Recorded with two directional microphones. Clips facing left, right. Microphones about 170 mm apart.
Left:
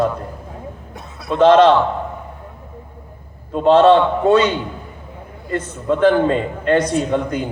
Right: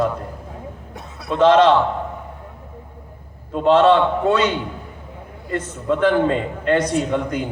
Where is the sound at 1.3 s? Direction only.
40° left (ahead or behind).